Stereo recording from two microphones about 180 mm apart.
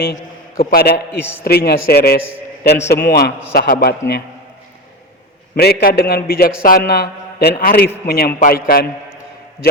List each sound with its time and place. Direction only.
0.0 s a man's voice: 55° left (ahead or behind)
5.8 s a man's voice: 60° left (ahead or behind)